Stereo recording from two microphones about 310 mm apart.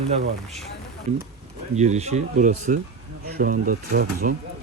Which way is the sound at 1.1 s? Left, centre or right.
Right.